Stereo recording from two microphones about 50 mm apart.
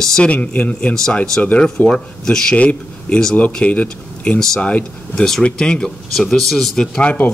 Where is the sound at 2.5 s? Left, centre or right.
Left.